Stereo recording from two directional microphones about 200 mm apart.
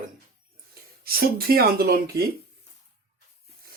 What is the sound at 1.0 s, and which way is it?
Speech, 50° right (ahead or behind).